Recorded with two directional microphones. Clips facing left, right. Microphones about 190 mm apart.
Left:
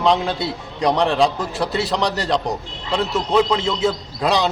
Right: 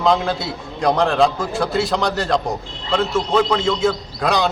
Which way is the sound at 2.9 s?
20° left (ahead or behind).